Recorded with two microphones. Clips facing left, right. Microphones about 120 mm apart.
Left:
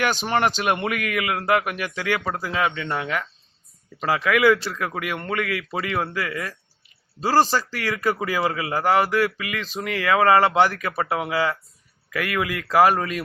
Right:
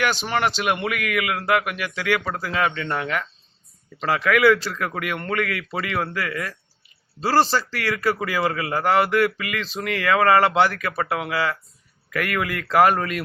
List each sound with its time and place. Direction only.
0.3 s a man's voice: 20° left (ahead or behind)
0.7 s a man's voice: 30° left (ahead or behind); by 13.2 s 5° left (ahead or behind)